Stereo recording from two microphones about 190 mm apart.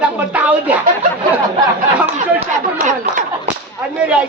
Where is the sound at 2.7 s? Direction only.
40° right (ahead or behind).